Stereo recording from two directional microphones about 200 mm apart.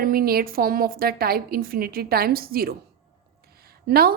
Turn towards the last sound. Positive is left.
turn(degrees=-50)  # may be behind; listen again after turning